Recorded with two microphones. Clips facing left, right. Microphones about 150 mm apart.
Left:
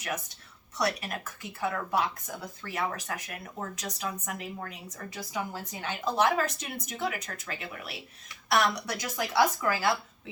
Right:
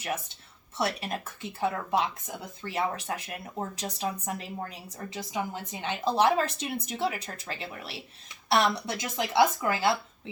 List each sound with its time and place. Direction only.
0.0 s speech: 30° right (ahead or behind)
5.3 s speech: 20° right (ahead or behind)